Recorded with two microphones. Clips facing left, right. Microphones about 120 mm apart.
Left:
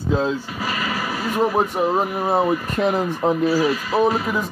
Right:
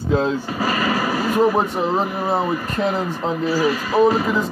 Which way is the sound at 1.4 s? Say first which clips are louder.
Even; 10° left (ahead or behind).